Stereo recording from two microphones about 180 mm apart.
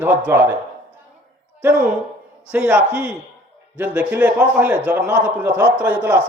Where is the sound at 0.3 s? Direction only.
10° right (ahead or behind).